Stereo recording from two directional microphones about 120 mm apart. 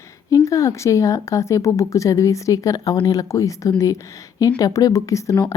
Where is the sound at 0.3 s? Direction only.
30° left (ahead or behind).